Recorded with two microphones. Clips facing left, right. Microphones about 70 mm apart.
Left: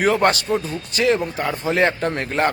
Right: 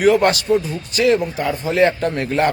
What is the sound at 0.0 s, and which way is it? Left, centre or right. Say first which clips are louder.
Speech: right 3 dB; left.